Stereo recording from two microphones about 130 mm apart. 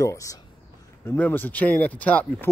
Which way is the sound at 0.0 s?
25° left (ahead or behind).